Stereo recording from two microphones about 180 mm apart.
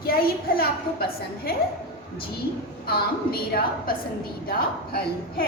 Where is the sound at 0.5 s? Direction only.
55° left (ahead or behind).